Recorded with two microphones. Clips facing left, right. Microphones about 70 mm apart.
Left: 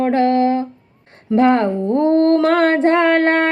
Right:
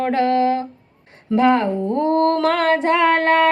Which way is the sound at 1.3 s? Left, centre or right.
Left.